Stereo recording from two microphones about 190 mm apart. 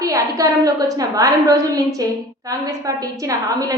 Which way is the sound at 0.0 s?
15° right (ahead or behind).